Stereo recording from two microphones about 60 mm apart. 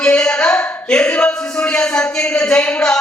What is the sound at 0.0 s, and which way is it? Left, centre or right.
Speech, centre.